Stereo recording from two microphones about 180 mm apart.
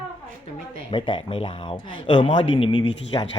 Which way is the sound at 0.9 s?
25° left (ahead or behind).